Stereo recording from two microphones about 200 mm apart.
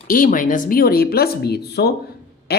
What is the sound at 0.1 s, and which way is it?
Speech, 45° left (ahead or behind).